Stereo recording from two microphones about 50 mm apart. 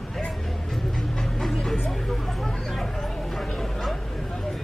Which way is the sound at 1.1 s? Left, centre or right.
Centre.